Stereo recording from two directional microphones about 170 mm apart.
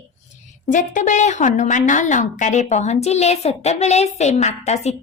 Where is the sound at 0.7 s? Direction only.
45° left (ahead or behind).